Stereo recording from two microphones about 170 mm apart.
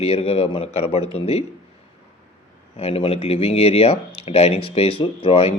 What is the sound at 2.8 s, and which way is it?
Speech, 35° left (ahead or behind).